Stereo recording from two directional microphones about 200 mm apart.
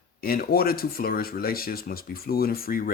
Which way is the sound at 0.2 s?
50° left (ahead or behind).